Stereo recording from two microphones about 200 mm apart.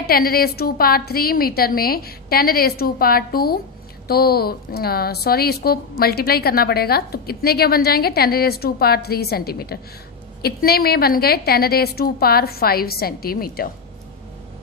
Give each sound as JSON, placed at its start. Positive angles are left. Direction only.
{"t": 0.1, "sound": "a woman's voice", "side_deg": 50}